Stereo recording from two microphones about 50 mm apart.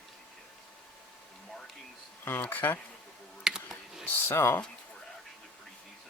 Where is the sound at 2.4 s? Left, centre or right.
Left.